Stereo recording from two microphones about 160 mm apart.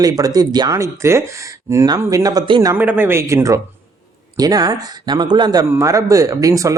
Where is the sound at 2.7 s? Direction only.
10° right (ahead or behind).